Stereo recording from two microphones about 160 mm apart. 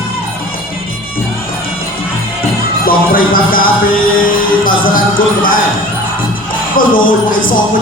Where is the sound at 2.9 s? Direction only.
65° left (ahead or behind).